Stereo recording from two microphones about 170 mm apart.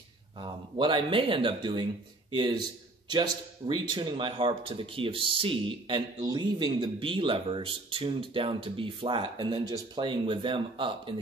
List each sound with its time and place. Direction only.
0.4 s speech: 30° right (ahead or behind)